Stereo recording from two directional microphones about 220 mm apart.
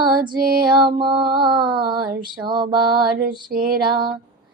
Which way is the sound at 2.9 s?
40° right (ahead or behind).